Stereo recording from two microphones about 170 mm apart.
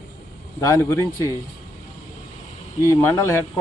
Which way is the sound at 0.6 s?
15° left (ahead or behind).